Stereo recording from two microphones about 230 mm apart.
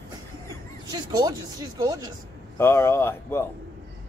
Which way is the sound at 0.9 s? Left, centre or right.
Centre.